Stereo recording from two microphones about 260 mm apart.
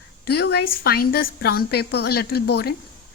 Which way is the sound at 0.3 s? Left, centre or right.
Left.